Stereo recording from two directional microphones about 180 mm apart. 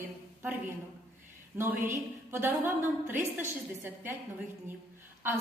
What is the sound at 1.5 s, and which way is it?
A woman's voice, 10° right (ahead or behind).